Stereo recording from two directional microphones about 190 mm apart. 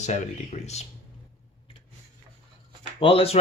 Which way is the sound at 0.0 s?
35° left (ahead or behind).